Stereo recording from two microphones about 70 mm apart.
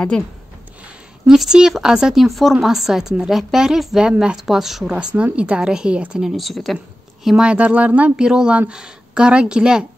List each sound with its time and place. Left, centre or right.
1.2 s speech: centre
5.1 s speech: centre
6.3 s speech: centre
7.2 s speech: centre